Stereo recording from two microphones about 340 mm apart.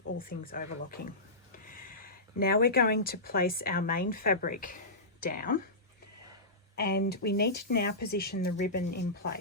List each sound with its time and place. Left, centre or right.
0.2 s speech: left
6.7 s speech: left